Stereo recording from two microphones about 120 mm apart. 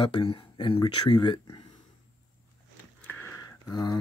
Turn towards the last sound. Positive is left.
turn(degrees=35)  # may be behind; listen again after turning